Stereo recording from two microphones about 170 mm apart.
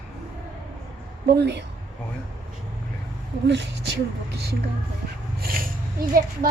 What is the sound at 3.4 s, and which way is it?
Speech, 90° right.